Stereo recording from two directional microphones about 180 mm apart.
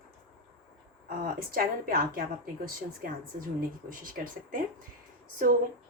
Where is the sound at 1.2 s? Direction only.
55° right (ahead or behind).